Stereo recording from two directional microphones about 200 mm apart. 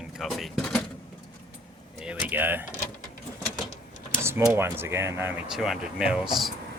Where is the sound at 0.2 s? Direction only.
Centre (ahead or behind).